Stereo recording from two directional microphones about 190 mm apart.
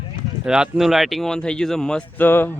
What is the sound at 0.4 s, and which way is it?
A man's voice, 5° right (ahead or behind).